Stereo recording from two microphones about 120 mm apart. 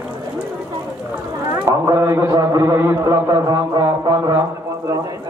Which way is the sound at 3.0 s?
30° right (ahead or behind).